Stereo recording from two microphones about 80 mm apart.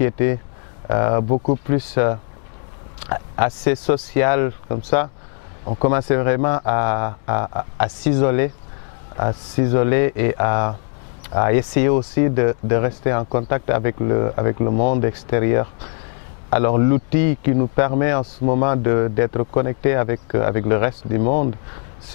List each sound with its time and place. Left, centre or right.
0.0 s speech: centre